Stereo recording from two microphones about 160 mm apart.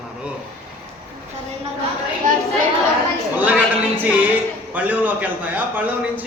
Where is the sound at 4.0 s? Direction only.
10° right (ahead or behind).